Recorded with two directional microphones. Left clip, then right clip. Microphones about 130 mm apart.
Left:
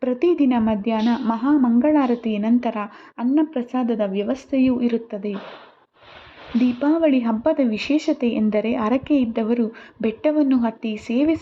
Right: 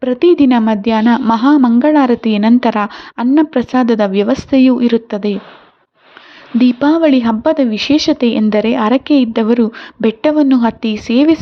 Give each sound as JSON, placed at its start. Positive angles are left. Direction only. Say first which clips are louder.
{"t": 0.0, "sound": "speech", "louder": "right 9 dB", "side_deg": -25}
{"t": 0.3, "sound": "a woman's voice", "louder": "right 9 dB", "side_deg": -50}
{"t": 0.6, "sound": "a woman's voice", "louder": "right 8 dB", "side_deg": -35}
{"t": 3.8, "sound": "a woman's voice", "louder": "right 10 dB", "side_deg": -45}
{"t": 6.6, "sound": "a woman's voice", "louder": "right 8 dB", "side_deg": -40}
{"t": 9.3, "sound": "a woman's voice", "louder": "right 9 dB", "side_deg": -45}